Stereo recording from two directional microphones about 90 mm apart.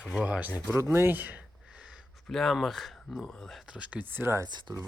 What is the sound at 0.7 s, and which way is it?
Speech, 30° right (ahead or behind).